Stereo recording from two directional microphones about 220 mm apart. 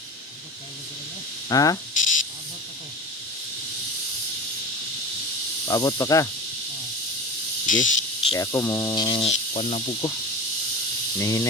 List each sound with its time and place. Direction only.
1.5 s speech: 15° left (ahead or behind)
1.9 s a sound: 35° left (ahead or behind)
5.6 s speech: 15° left (ahead or behind)
7.7 s insect: 35° left (ahead or behind)
8.3 s speech: 15° left (ahead or behind)
11.2 s speech: 15° left (ahead or behind)